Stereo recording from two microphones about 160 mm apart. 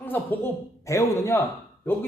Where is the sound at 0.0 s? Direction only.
10° left (ahead or behind).